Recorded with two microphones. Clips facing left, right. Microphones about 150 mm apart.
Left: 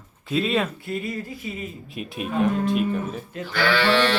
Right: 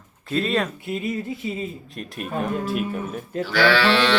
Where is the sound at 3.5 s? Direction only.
90° right.